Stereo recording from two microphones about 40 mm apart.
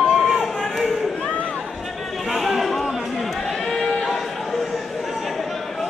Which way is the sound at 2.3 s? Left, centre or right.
Centre.